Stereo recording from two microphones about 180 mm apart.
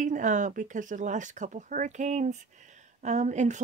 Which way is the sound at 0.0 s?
45° right (ahead or behind).